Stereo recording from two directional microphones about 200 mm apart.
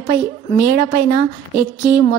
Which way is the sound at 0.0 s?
50° right (ahead or behind).